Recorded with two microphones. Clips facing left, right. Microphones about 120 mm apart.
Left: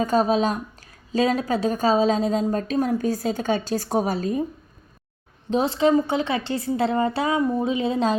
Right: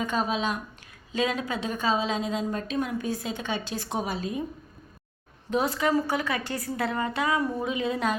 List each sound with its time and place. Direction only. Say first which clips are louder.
0.0 s a woman's voice: left 7 dB; 40° left (ahead or behind)
5.5 s a woman's voice: left 6 dB; 25° left (ahead or behind)